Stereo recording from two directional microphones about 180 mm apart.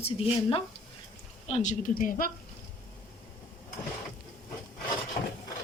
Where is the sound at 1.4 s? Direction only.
40° left (ahead or behind).